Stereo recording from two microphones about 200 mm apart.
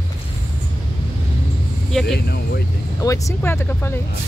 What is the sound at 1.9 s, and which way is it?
Speech, centre (ahead or behind).